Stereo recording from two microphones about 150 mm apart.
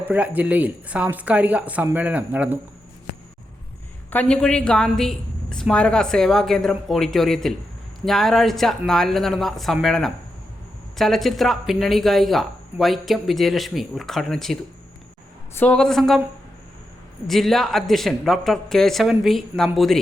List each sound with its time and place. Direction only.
0.1 s speech: 10° right (ahead or behind)
4.1 s a woman's voice: 5° left (ahead or behind)
17.2 s a woman's voice: centre (ahead or behind)